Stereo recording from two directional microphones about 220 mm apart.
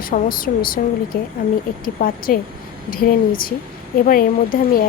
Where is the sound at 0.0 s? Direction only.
40° left (ahead or behind).